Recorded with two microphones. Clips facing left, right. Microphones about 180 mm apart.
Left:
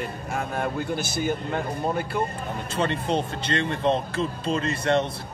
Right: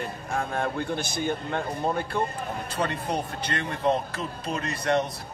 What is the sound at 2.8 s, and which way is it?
Speech, 25° left (ahead or behind).